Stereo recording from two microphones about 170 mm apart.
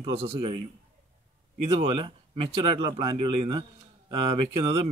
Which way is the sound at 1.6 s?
35° right (ahead or behind).